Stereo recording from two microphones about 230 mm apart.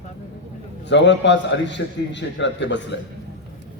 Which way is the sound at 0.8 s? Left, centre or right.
Left.